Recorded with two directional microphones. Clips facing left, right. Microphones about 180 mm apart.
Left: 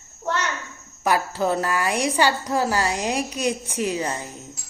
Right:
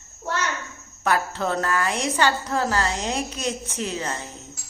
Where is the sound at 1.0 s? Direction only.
10° left (ahead or behind).